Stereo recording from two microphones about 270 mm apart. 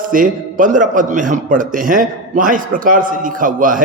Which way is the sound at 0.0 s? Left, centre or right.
Right.